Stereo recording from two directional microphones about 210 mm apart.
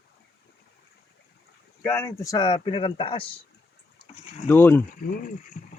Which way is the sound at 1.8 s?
15° left (ahead or behind).